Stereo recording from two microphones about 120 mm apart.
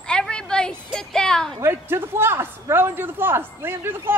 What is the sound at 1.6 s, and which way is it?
Speech, 20° right (ahead or behind).